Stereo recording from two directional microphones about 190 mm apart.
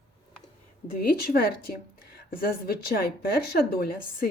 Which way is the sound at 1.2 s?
55° left (ahead or behind).